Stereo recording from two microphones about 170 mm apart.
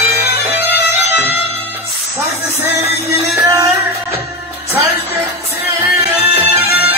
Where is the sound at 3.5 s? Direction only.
20° right (ahead or behind).